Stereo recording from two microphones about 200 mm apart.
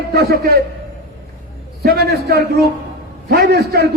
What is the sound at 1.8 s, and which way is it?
A man's voice, 55° right (ahead or behind).